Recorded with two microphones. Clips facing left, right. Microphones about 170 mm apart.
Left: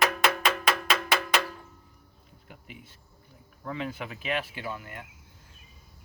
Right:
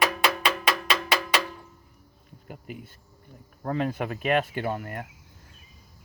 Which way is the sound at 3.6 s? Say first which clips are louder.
Right 7 dB; 50° right (ahead or behind).